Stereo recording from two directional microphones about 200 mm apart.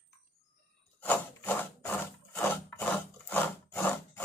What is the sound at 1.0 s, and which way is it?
Wood, 10° left (ahead or behind).